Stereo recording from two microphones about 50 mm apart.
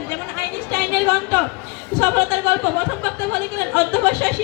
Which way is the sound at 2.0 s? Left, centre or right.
Left.